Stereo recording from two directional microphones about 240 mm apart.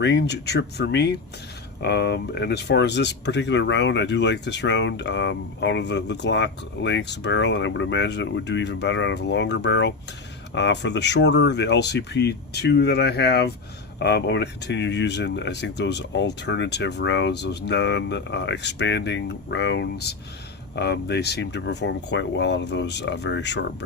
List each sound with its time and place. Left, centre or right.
0.0 s speech: left